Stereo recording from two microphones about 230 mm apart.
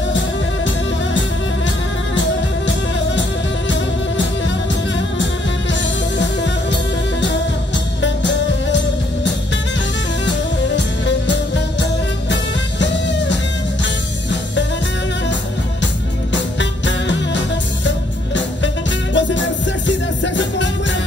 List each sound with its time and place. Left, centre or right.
3.2 s music: left
5.7 s music: left
8.0 s music: left
11.1 s music: left
16.3 s music: left